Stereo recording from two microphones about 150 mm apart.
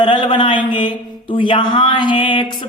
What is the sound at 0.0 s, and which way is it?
A man's voice, 35° left (ahead or behind).